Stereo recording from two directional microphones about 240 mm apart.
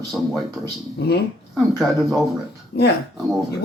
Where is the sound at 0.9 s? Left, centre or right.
Left.